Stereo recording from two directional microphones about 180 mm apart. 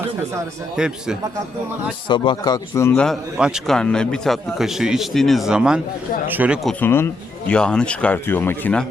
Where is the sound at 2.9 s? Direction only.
5° left (ahead or behind).